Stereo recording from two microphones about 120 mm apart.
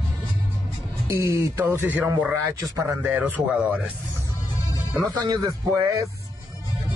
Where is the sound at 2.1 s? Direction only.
25° right (ahead or behind).